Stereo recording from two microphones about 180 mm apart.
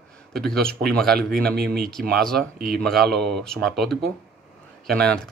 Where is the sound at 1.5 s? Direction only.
55° right (ahead or behind).